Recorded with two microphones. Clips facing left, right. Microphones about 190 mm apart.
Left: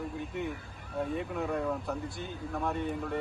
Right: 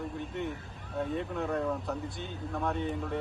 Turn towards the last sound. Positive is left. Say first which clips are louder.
# even
turn(degrees=0)  # may be behind; listen again after turning